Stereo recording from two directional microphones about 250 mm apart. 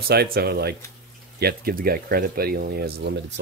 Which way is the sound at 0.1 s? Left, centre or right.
Right.